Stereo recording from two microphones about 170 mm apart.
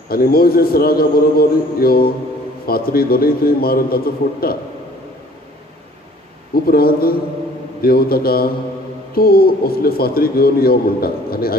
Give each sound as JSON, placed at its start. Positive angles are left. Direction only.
{"t": 0.1, "sound": "a man's voice", "side_deg": 60}
{"t": 6.5, "sound": "a man's voice", "side_deg": 60}